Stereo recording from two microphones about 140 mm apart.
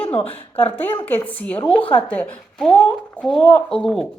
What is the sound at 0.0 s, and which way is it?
Speech, 40° left (ahead or behind).